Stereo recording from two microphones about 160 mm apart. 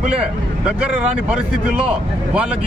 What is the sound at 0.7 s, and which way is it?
Speech, 5° right (ahead or behind).